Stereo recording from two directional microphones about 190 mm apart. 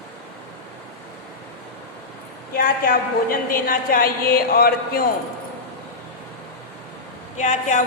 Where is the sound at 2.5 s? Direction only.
50° left (ahead or behind).